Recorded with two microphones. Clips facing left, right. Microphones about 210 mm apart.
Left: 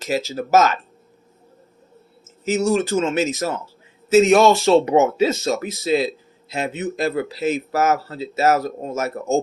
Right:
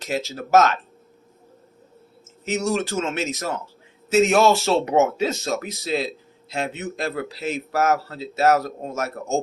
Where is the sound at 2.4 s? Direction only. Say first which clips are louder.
Left 4 dB; centre (ahead or behind).